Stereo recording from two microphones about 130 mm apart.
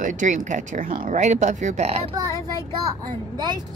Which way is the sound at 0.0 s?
75° right (ahead or behind).